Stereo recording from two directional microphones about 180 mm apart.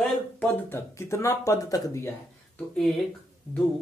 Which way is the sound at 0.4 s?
15° left (ahead or behind).